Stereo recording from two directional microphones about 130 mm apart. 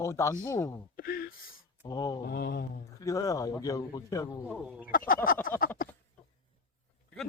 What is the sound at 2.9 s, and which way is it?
Speech, 25° left (ahead or behind).